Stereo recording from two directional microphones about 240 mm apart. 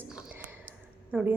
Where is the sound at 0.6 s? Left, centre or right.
Centre.